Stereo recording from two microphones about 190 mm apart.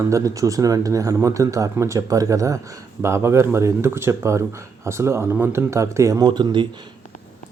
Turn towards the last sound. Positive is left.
turn(degrees=-25)  # may be behind; listen again after turning